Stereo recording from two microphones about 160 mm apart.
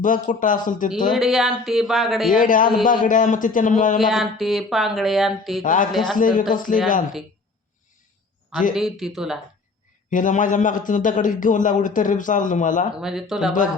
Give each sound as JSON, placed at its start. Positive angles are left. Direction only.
{"t": 0.0, "sound": "a man's voice", "side_deg": 55}
{"t": 1.1, "sound": "speech", "side_deg": 0}
{"t": 2.3, "sound": "a man's voice", "side_deg": 60}
{"t": 3.9, "sound": "speech", "side_deg": 0}
{"t": 5.6, "sound": "a man's voice", "side_deg": 55}
{"t": 5.9, "sound": "speech", "side_deg": 0}
{"t": 6.1, "sound": "a man's voice", "side_deg": 55}
{"t": 8.7, "sound": "speech", "side_deg": 0}
{"t": 10.1, "sound": "a man's voice", "side_deg": 55}
{"t": 13.0, "sound": "speech", "side_deg": -5}